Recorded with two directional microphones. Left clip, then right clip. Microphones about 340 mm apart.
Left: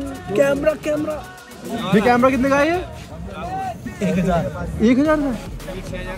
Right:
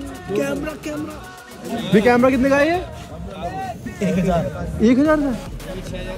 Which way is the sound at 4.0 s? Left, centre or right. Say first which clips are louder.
Even; centre.